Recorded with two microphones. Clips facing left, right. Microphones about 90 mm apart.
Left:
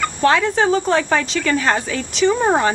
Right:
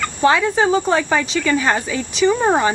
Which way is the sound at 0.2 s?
10° right (ahead or behind).